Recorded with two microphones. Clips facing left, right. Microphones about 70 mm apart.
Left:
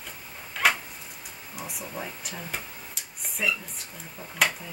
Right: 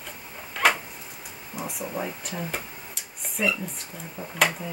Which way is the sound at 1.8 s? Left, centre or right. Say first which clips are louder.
Right 6 dB; centre.